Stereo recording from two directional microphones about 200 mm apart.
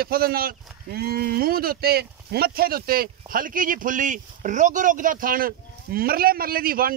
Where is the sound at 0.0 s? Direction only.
50° right (ahead or behind).